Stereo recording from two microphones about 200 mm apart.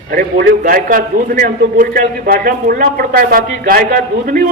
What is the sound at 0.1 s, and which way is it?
A man's voice, 45° right (ahead or behind).